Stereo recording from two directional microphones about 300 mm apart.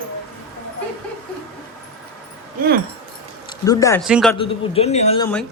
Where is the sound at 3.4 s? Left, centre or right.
Centre.